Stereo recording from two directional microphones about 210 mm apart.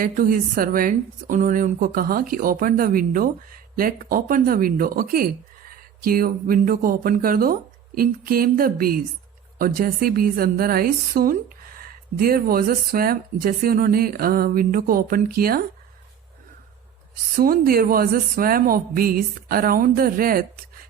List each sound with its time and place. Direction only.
0.0 s a woman's voice: 40° right (ahead or behind)
17.3 s a woman's voice: 45° right (ahead or behind)